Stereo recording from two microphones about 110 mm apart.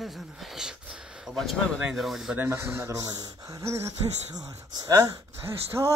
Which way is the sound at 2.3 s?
20° right (ahead or behind).